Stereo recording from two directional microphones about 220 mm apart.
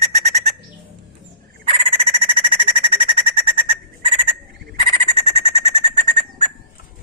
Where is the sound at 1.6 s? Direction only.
25° right (ahead or behind).